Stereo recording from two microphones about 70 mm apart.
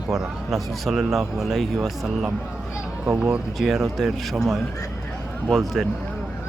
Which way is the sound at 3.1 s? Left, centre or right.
Centre.